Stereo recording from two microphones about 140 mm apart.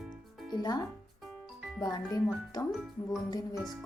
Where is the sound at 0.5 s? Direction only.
30° left (ahead or behind).